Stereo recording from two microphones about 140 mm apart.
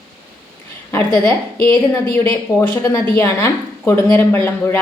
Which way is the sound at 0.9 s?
15° left (ahead or behind).